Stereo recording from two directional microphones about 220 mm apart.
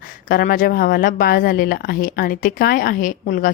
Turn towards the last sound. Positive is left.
turn(degrees=40)  # may be behind; listen again after turning